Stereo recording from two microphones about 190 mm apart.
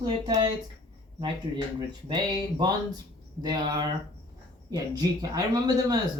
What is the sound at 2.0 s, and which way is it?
Speech, 20° right (ahead or behind).